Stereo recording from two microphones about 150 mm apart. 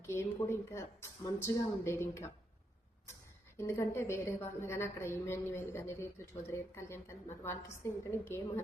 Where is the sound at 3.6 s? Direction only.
20° left (ahead or behind).